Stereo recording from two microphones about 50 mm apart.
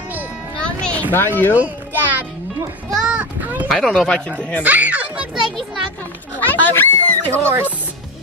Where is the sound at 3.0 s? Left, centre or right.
Right.